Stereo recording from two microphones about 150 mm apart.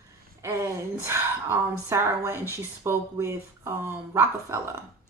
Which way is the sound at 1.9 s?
20° right (ahead or behind).